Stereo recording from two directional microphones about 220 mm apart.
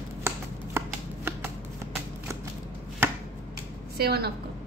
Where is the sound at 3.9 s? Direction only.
45° right (ahead or behind).